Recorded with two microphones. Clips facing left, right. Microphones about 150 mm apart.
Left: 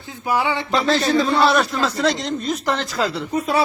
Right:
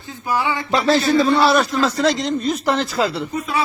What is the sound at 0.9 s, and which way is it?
A man's voice, 5° right (ahead or behind).